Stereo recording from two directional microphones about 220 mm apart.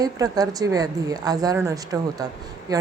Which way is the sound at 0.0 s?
15° right (ahead or behind).